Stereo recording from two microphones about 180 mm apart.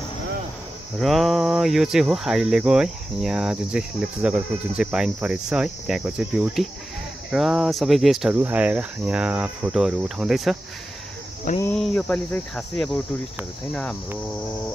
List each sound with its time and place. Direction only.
0.9 s cricket: centre (ahead or behind)
11.6 s cricket: 5° left (ahead or behind)